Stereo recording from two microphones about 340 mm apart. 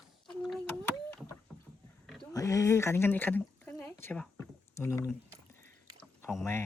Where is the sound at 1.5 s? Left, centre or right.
Centre.